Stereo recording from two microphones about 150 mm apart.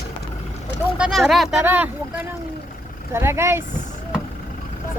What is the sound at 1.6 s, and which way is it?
Speech, 10° right (ahead or behind).